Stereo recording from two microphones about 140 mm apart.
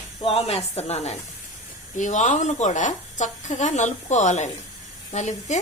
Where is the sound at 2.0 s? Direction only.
60° left (ahead or behind).